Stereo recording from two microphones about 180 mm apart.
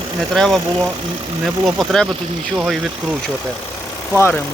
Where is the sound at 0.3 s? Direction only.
Centre (ahead or behind).